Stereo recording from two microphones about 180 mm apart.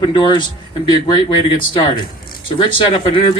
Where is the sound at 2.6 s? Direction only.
30° left (ahead or behind).